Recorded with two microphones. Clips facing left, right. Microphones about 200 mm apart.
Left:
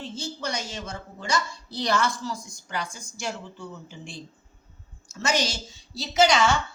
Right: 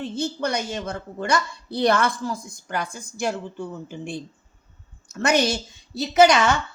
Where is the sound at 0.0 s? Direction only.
60° right (ahead or behind).